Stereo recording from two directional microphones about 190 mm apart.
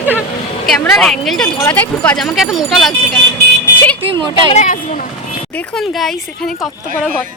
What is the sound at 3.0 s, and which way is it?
Vehicle, 5° left (ahead or behind).